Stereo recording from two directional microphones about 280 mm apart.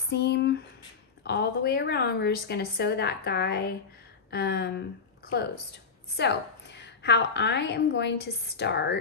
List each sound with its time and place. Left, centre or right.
0.1 s a woman's voice: left
6.1 s a woman's voice: left